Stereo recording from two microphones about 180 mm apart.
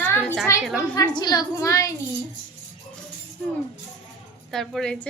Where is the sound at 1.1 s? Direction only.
25° left (ahead or behind).